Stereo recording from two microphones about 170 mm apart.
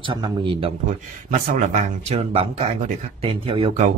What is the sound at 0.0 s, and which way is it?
Speech, 30° right (ahead or behind).